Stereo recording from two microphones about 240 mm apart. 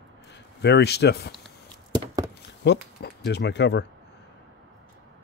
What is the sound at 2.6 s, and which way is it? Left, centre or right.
Speech, left.